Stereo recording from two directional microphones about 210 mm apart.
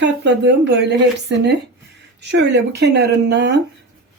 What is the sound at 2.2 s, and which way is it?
Speech, 55° right (ahead or behind).